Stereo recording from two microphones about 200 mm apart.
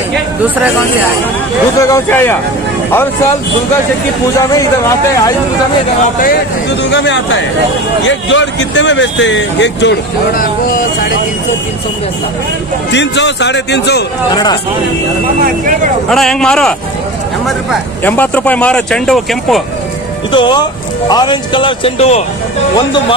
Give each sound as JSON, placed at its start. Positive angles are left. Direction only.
{"t": 1.8, "sound": "speech", "side_deg": 15}
{"t": 4.6, "sound": "speech", "side_deg": 15}
{"t": 6.9, "sound": "speech", "side_deg": 65}
{"t": 12.9, "sound": "speech", "side_deg": 60}
{"t": 14.3, "sound": "speech", "side_deg": 20}
{"t": 15.4, "sound": "speech", "side_deg": -40}
{"t": 16.1, "sound": "speech", "side_deg": 0}
{"t": 18.0, "sound": "speech", "side_deg": 10}
{"t": 20.3, "sound": "speech", "side_deg": 20}